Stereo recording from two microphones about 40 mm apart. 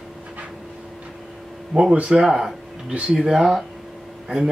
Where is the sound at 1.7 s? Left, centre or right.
Centre.